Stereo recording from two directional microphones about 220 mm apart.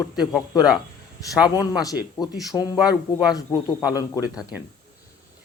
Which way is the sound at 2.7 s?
5° right (ahead or behind).